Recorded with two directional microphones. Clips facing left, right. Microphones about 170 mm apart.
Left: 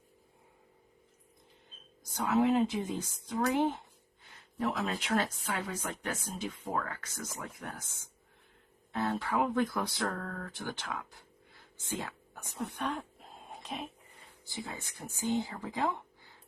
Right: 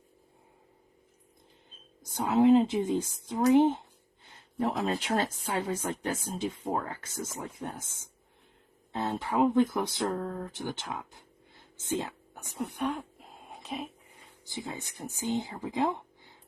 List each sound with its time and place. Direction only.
2.1 s speech: 25° right (ahead or behind)
4.8 s speech: 35° right (ahead or behind); by 13.8 s centre (ahead or behind)
14.4 s speech: 20° right (ahead or behind)